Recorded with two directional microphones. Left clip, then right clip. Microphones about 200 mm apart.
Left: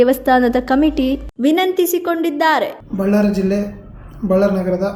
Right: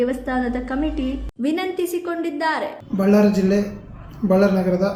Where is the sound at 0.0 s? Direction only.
45° left (ahead or behind).